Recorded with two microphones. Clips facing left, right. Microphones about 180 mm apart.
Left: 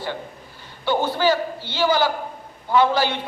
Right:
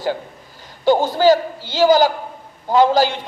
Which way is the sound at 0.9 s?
45° right (ahead or behind).